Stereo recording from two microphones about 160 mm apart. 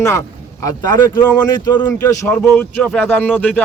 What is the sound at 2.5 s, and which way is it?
Speech, 5° left (ahead or behind).